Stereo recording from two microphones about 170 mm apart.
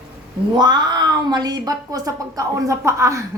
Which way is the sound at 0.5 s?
25° right (ahead or behind).